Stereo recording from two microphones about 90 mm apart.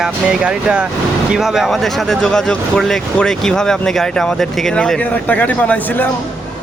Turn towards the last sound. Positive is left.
turn(degrees=20)  # may be behind; listen again after turning